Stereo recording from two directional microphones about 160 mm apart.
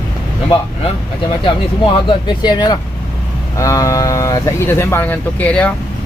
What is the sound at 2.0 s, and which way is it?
Speech, 25° left (ahead or behind).